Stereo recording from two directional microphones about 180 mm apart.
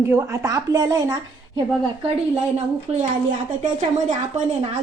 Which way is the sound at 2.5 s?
35° right (ahead or behind).